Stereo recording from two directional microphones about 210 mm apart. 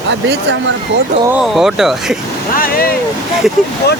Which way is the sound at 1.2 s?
5° right (ahead or behind).